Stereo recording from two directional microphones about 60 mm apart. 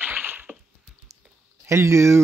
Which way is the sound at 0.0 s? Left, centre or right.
Right.